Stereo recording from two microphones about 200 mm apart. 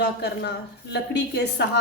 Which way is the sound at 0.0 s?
55° left (ahead or behind).